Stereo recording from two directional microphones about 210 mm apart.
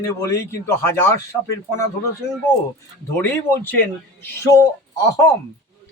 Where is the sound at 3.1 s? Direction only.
10° left (ahead or behind).